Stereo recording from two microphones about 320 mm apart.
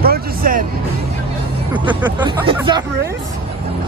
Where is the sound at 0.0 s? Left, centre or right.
Right.